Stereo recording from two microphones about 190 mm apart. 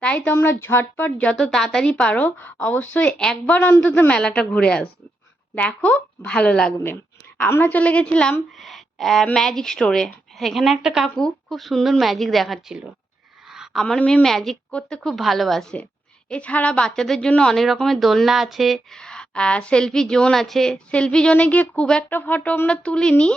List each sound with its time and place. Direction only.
0.0 s speech: 10° left (ahead or behind)